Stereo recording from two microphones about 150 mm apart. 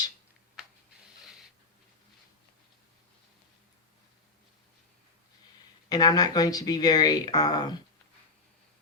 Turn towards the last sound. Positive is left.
turn(degrees=25)  # may be behind; listen again after turning